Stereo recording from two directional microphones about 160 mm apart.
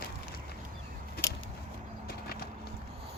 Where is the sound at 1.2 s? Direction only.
15° left (ahead or behind).